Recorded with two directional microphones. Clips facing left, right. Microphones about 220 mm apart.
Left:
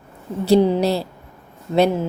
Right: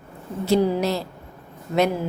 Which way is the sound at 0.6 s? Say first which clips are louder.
Left 4 dB; 25° left (ahead or behind).